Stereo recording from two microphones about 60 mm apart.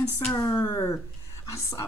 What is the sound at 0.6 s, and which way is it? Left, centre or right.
Speech, left.